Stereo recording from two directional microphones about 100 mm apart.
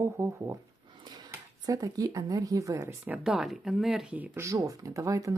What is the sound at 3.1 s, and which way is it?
Speech, 5° right (ahead or behind).